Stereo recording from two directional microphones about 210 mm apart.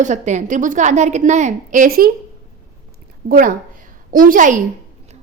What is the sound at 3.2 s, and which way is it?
A woman's voice, 40° right (ahead or behind).